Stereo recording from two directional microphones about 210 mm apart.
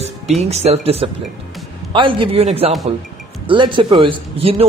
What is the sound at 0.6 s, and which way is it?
Speech, 30° right (ahead or behind).